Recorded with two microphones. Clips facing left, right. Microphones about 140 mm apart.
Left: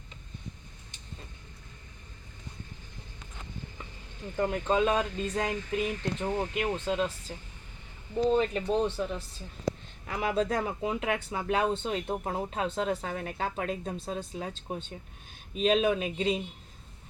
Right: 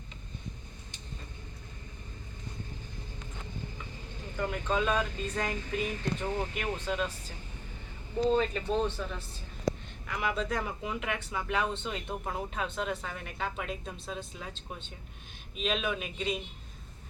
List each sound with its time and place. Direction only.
4.4 s speech: 30° left (ahead or behind)
8.3 s speech: 20° left (ahead or behind)
10.1 s speech: 35° left (ahead or behind)